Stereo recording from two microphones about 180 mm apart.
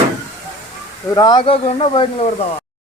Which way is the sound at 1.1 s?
25° left (ahead or behind).